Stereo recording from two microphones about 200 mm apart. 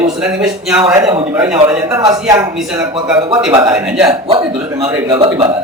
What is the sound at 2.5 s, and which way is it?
A man's voice, 5° right (ahead or behind).